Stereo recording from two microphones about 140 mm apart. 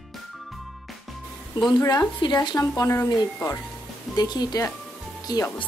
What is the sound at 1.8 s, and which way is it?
Speech, 20° left (ahead or behind).